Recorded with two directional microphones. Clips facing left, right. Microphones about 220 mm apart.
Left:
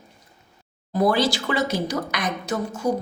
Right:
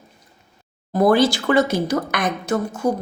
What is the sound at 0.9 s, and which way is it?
Speech, 50° right (ahead or behind).